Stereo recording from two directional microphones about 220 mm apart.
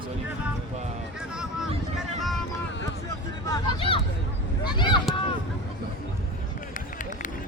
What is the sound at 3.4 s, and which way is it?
Hubbub, 20° left (ahead or behind).